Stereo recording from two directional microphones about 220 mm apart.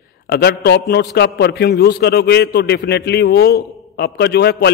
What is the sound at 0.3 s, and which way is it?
A man's voice, 45° left (ahead or behind).